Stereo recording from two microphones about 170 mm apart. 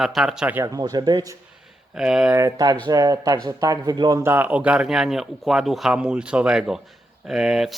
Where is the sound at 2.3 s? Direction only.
20° right (ahead or behind).